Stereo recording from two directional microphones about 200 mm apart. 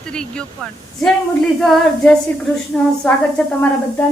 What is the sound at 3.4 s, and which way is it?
Speech, 5° left (ahead or behind).